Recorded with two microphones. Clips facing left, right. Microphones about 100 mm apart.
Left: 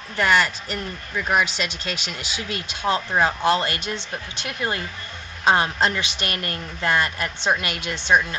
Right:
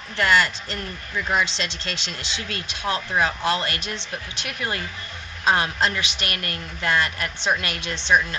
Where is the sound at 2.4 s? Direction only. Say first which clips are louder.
Left 3 dB; 15° left (ahead or behind).